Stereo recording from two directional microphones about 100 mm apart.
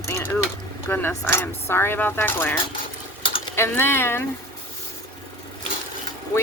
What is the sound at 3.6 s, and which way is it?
Speech, 25° left (ahead or behind).